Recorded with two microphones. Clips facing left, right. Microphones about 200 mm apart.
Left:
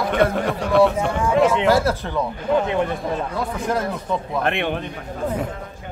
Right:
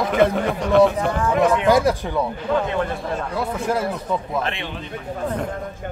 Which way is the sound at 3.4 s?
5° right (ahead or behind).